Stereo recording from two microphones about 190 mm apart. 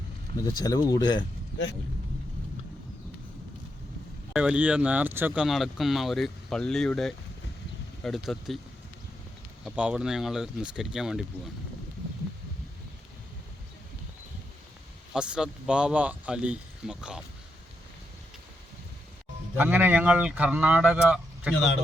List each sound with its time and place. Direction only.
0.4 s speech: 20° left (ahead or behind)
4.4 s speech: 5° right (ahead or behind)
9.6 s speech: 5° right (ahead or behind)
15.1 s speech: 5° right (ahead or behind)
19.5 s speech: 10° right (ahead or behind)